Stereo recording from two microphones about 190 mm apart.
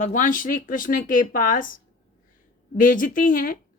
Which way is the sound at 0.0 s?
45° left (ahead or behind).